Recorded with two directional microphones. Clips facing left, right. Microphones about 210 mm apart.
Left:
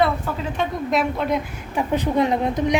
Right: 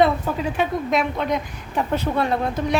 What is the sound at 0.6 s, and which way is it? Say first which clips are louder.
A woman's voice: left 1 dB; centre (ahead or behind).